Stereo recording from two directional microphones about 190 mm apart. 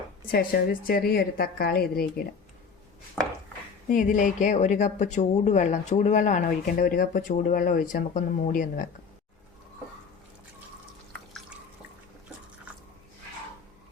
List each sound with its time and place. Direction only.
0.3 s a woman's voice: 50° left (ahead or behind)
3.8 s speech: 40° left (ahead or behind)